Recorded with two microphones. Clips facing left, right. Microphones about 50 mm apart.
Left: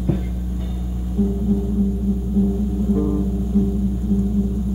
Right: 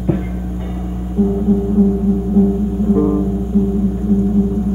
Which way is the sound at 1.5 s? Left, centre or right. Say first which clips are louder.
Right 7 dB; right.